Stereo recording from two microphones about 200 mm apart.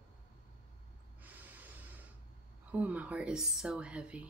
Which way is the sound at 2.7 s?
5° right (ahead or behind).